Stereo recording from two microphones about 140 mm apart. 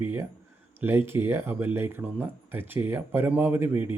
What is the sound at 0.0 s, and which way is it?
Speech, 15° right (ahead or behind).